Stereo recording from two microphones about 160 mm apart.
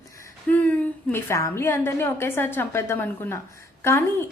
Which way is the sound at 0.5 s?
10° left (ahead or behind).